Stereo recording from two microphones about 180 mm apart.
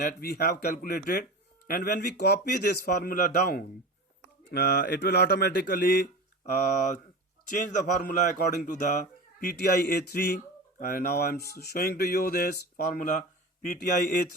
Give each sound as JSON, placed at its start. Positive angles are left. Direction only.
{"t": 0.0, "sound": "speech", "side_deg": 60}
{"t": 7.7, "sound": "speech", "side_deg": 45}
{"t": 9.4, "sound": "speech", "side_deg": 60}